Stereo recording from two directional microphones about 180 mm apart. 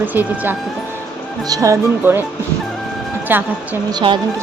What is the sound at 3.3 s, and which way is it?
Speech, 10° right (ahead or behind).